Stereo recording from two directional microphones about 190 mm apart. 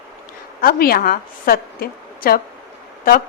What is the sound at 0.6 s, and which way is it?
A woman's voice, 50° left (ahead or behind).